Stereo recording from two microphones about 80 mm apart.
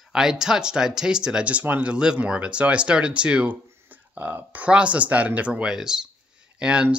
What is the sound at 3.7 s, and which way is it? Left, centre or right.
Speech, right.